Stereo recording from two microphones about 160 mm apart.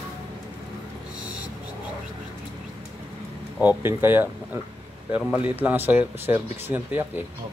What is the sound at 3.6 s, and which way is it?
A man's voice, 10° right (ahead or behind).